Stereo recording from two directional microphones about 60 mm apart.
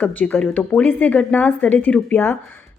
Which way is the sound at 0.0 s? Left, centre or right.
Left.